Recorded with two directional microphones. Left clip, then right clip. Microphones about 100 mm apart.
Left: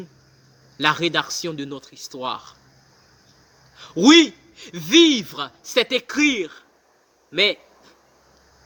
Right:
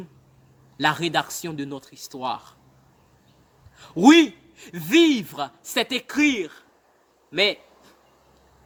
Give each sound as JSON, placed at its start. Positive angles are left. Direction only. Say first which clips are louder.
{"t": 0.8, "sound": "speech", "louder": "left 2 dB", "side_deg": -50}
{"t": 3.8, "sound": "speech", "louder": "left 2 dB", "side_deg": -45}
{"t": 7.3, "sound": "a sound", "louder": "left 2 dB", "side_deg": -50}